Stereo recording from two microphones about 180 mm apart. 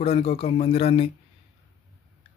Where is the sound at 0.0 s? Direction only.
35° left (ahead or behind).